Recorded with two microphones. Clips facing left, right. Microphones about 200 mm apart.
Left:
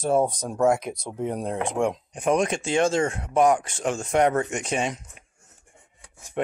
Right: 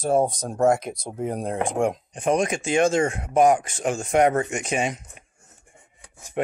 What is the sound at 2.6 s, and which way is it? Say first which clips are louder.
Speech: right 4 dB; 15° right (ahead or behind).